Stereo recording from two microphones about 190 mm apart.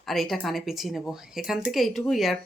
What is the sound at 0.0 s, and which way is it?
Speech, centre (ahead or behind).